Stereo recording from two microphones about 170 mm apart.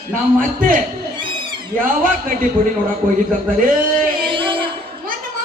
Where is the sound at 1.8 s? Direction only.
55° right (ahead or behind).